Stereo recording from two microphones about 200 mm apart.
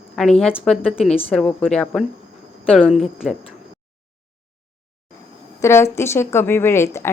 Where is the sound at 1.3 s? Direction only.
Centre (ahead or behind).